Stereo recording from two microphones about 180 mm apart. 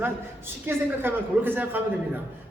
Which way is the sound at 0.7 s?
10° right (ahead or behind).